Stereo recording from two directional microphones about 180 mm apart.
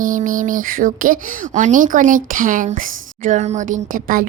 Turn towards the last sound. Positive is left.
turn(degrees=-50)  # may be behind; listen again after turning